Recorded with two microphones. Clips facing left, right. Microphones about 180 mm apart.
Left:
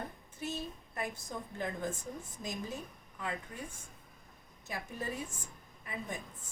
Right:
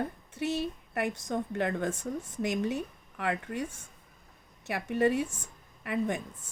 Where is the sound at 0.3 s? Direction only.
75° right (ahead or behind).